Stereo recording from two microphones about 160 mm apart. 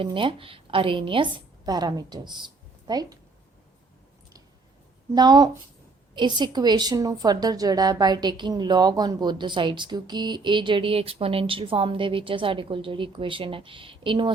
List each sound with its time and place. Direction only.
0.0 s a woman's voice: 30° right (ahead or behind)
5.1 s a woman's voice: 25° right (ahead or behind)